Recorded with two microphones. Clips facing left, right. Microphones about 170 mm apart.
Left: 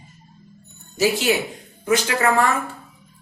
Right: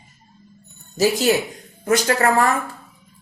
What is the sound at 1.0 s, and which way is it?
Speech, 40° right (ahead or behind).